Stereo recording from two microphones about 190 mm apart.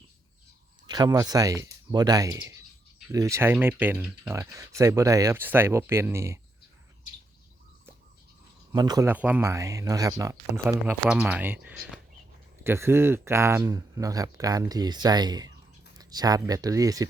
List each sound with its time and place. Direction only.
0.9 s speech: 20° right (ahead or behind)
8.7 s speech: 20° right (ahead or behind)
10.7 s speech: 5° right (ahead or behind)